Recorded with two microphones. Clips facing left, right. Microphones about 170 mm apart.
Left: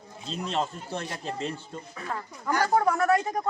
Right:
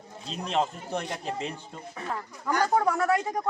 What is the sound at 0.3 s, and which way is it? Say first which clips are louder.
Speech: right 2 dB; 15° right (ahead or behind).